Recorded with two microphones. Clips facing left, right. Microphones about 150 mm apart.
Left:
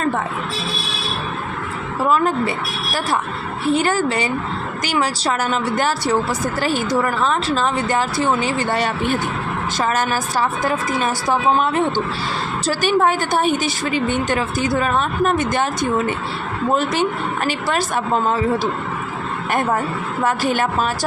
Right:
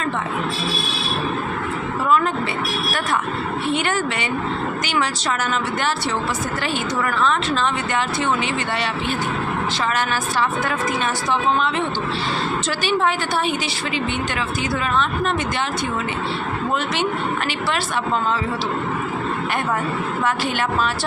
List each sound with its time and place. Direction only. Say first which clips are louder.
2.0 s a woman's voice: left 2 dB; 40° left (ahead or behind)
3.7 s a woman's voice: left 6 dB; 35° left (ahead or behind)
20.2 s a woman's voice: left 5 dB; 45° left (ahead or behind)